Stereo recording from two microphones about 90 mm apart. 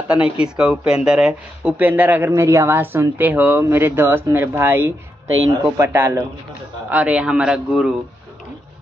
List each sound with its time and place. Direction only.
0.1 s speech: 10° right (ahead or behind)
2.3 s speech: 35° right (ahead or behind)
6.9 s speech: 15° right (ahead or behind)